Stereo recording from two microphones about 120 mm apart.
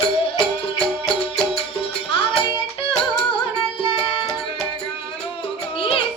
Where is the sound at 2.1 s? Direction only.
50° left (ahead or behind).